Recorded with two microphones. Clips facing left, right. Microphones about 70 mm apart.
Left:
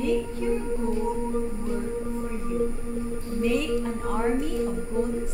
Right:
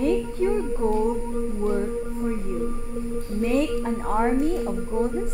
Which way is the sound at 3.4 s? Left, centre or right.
Right.